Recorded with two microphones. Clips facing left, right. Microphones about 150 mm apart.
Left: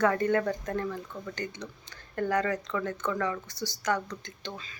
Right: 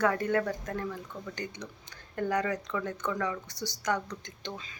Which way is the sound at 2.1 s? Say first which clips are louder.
Left 2 dB; 10° right (ahead or behind).